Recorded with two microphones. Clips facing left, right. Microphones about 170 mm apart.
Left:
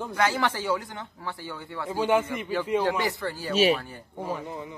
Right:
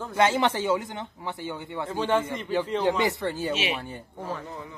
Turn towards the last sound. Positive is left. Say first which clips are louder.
# left 2 dB
turn(degrees=15)  # may be behind; listen again after turning